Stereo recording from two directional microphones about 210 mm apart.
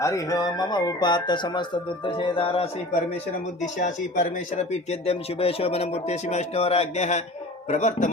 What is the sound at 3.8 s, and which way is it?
Speech, 35° left (ahead or behind).